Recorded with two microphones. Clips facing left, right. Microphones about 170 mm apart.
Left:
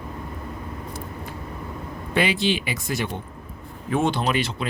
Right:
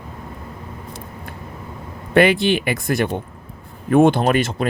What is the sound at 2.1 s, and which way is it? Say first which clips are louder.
Speech: right 7 dB; 55° right (ahead or behind).